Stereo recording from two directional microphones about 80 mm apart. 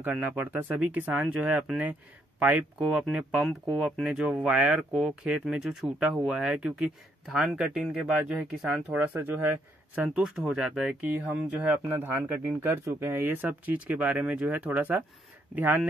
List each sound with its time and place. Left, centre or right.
0.0 s speech: right; by 8.1 s centre
8.3 s speech: centre
10.2 s speech: centre
11.0 s speech: right